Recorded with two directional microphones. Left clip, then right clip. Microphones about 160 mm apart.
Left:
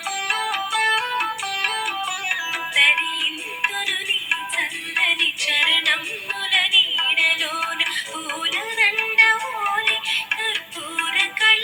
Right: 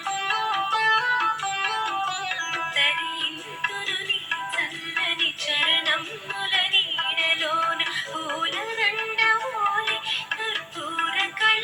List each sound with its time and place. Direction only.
0.3 s music: 20° left (ahead or behind)